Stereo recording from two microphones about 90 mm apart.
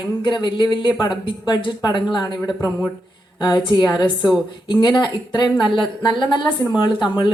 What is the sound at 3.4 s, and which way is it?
A woman's voice, 60° left (ahead or behind).